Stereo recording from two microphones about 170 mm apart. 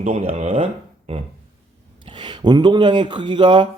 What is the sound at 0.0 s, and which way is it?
Speech, 35° right (ahead or behind).